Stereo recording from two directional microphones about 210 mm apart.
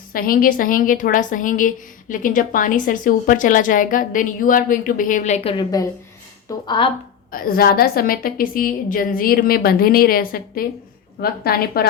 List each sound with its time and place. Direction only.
0.1 s a woman's voice: 45° left (ahead or behind); by 6.9 s 25° left (ahead or behind)
7.3 s a woman's voice: 45° left (ahead or behind)